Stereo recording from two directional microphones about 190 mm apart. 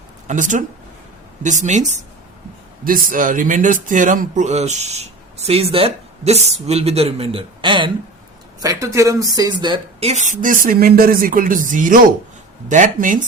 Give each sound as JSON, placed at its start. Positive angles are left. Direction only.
{"t": 0.3, "sound": "a woman's voice", "side_deg": -40}